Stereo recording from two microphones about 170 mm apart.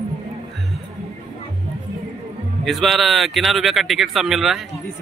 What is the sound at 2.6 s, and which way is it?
Speech, centre (ahead or behind).